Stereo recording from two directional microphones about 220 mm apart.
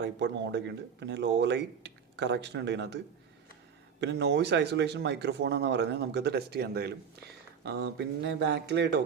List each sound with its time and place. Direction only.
0.0 s speech: 50° right (ahead or behind)
4.0 s speech: 50° right (ahead or behind)